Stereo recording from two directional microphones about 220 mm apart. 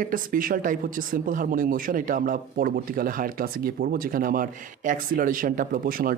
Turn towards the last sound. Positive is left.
turn(degrees=-40)  # may be behind; listen again after turning